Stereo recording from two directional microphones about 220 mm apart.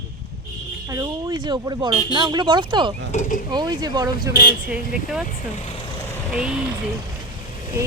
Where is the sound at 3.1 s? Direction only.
35° left (ahead or behind).